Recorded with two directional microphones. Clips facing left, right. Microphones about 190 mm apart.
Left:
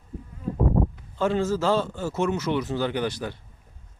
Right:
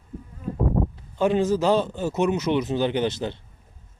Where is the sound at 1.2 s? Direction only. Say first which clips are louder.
Right 3 dB; 15° right (ahead or behind).